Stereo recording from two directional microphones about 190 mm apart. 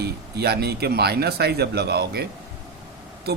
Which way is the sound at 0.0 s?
55° right (ahead or behind).